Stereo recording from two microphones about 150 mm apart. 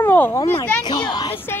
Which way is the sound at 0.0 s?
15° left (ahead or behind).